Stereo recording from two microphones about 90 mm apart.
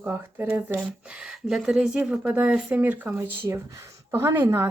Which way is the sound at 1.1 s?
10° right (ahead or behind).